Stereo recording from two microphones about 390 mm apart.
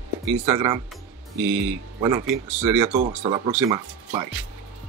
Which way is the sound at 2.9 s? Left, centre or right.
Centre.